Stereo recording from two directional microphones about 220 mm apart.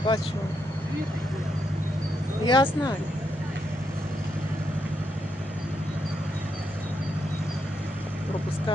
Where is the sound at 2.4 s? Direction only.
20° left (ahead or behind).